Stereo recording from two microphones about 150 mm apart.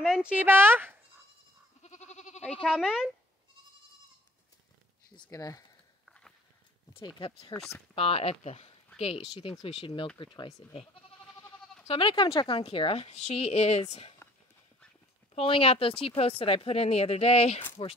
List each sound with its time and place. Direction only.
0.0 s speech: 5° right (ahead or behind)
1.8 s goat: 50° left (ahead or behind)
2.4 s speech: 5° left (ahead or behind)
5.1 s speech: 25° left (ahead or behind)
6.0 s walk: 5° left (ahead or behind)
7.2 s speech: 35° left (ahead or behind)
11.9 s speech: 35° left (ahead or behind)
15.3 s speech: 40° left (ahead or behind)